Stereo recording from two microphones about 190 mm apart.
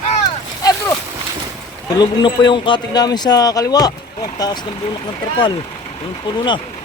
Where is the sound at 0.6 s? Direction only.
20° left (ahead or behind).